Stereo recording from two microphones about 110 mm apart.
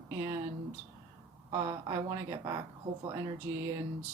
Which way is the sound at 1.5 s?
35° right (ahead or behind).